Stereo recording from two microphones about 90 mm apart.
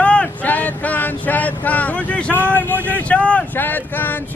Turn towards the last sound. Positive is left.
turn(degrees=20)  # may be behind; listen again after turning